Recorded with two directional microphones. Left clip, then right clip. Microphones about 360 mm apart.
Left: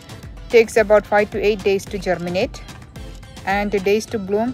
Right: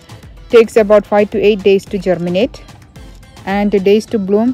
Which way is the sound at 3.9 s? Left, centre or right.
Centre.